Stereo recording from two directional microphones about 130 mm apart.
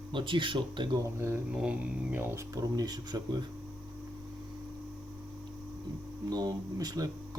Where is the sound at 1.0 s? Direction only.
20° right (ahead or behind).